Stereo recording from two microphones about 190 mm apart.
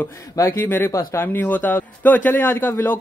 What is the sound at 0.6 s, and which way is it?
Speech, 10° left (ahead or behind).